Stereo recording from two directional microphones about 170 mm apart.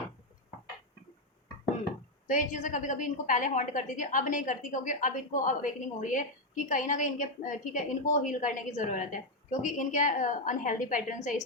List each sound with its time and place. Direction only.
2.2 s a woman's voice: 50° left (ahead or behind)